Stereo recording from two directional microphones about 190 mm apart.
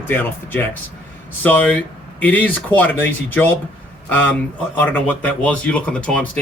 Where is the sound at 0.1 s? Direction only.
10° left (ahead or behind).